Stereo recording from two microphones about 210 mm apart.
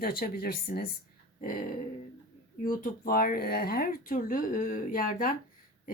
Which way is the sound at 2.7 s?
45° left (ahead or behind).